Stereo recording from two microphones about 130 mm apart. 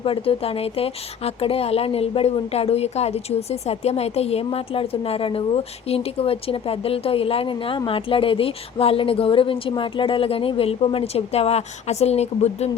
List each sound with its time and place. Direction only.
0.0 s speech: 45° left (ahead or behind)